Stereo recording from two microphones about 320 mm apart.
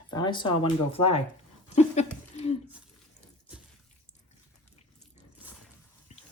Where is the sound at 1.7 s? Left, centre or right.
Left.